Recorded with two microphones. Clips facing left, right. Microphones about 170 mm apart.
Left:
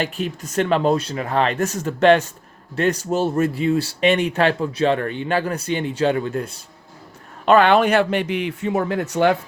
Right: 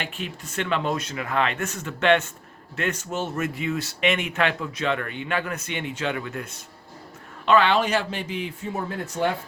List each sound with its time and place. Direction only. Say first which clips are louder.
0.0 s speech: left 8 dB; 40° left (ahead or behind)
7.4 s speech: left 5 dB; 50° left (ahead or behind); by 9.4 s 80° left